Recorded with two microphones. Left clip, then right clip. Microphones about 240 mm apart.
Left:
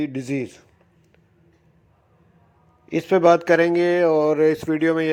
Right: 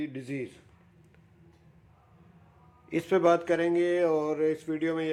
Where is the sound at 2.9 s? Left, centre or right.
Centre.